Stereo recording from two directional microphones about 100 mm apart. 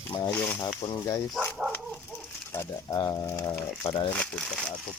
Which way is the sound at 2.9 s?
40° left (ahead or behind).